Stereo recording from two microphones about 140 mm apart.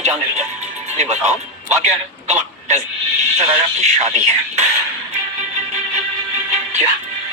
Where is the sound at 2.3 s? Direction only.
55° right (ahead or behind).